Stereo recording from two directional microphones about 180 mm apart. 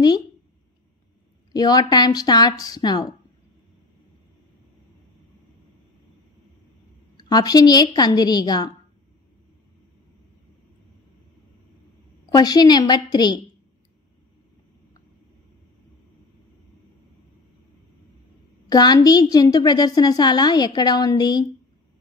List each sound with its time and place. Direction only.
1.5 s a woman's voice: 20° left (ahead or behind)
7.2 s a woman's voice: 20° left (ahead or behind)
12.3 s a woman's voice: 20° left (ahead or behind)
18.7 s a woman's voice: 20° left (ahead or behind)